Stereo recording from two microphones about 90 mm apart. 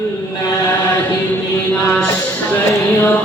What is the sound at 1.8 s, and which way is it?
Music, 15° left (ahead or behind).